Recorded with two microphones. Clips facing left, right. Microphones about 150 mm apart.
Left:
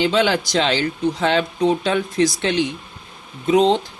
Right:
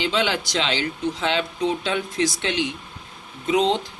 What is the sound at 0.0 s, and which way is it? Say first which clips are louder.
Speech: left 5 dB; 45° left (ahead or behind).